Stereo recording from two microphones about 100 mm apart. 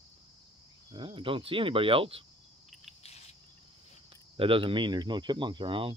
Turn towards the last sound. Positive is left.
turn(degrees=-60)  # may be behind; listen again after turning